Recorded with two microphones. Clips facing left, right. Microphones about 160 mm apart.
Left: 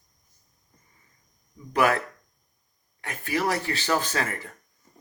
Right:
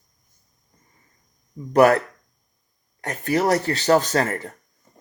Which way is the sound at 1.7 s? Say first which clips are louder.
Right 8 dB; 40° right (ahead or behind).